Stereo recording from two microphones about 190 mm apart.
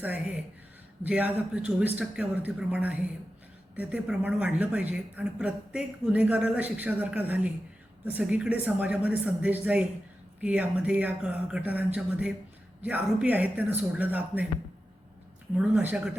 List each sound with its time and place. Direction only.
1.0 s speech: 10° right (ahead or behind)
15.5 s speech: 5° right (ahead or behind)